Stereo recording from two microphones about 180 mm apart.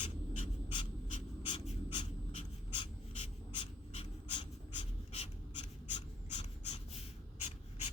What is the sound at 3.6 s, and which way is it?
Pant, 30° left (ahead or behind).